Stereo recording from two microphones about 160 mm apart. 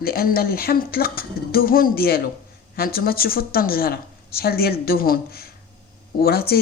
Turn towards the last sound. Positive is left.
turn(degrees=75)  # may be behind; listen again after turning